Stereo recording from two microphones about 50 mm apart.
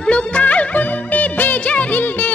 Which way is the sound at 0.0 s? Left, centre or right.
Left.